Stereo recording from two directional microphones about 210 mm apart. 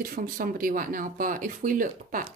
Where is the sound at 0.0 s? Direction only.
40° right (ahead or behind).